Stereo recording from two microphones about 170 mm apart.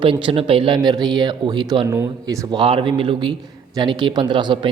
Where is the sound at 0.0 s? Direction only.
30° right (ahead or behind).